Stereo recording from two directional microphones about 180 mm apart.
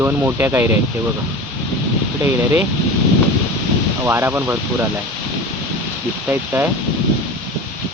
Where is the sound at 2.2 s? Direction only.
10° right (ahead or behind).